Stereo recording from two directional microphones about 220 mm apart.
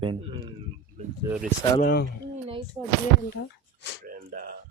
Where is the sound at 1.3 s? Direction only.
5° right (ahead or behind).